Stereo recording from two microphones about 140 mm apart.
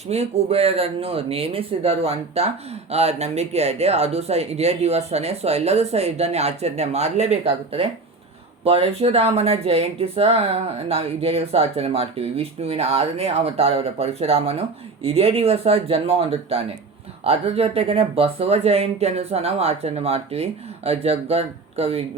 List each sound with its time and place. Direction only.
0.1 s speech: 50° right (ahead or behind)